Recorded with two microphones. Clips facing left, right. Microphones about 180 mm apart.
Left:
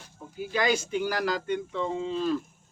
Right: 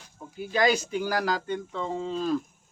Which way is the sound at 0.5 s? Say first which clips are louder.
Right 2 dB; 40° right (ahead or behind).